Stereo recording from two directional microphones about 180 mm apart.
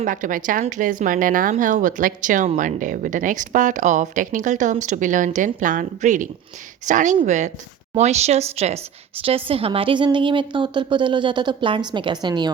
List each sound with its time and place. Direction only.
0.0 s a woman's voice: 45° right (ahead or behind); by 12.5 s 25° right (ahead or behind)